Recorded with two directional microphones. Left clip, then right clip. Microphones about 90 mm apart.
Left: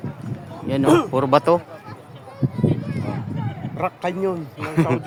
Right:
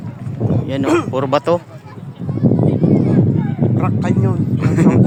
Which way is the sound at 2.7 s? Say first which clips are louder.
Right 11 dB; 60° left (ahead or behind).